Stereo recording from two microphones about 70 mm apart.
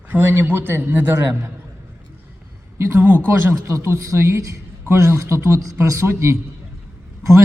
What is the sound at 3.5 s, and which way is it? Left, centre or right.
A man's voice, right.